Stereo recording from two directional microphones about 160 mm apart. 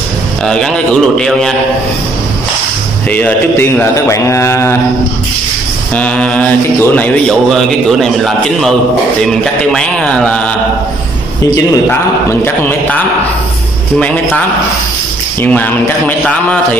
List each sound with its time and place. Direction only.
1.1 s a man's voice: centre (ahead or behind)
3.1 s a man's voice: 10° left (ahead or behind)
5.9 s a man's voice: 5° left (ahead or behind)
11.5 s a man's voice: 15° left (ahead or behind)
15.4 s a man's voice: 10° left (ahead or behind)